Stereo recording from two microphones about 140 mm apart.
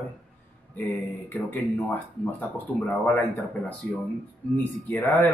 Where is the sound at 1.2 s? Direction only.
15° left (ahead or behind).